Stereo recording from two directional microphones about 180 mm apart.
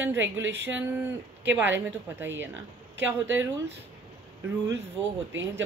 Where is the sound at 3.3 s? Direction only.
90° right.